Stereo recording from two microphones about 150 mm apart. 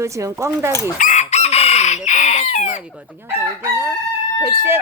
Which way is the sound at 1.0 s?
50° left (ahead or behind).